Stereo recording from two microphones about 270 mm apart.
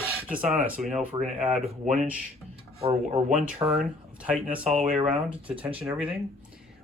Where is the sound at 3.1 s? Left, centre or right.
Right.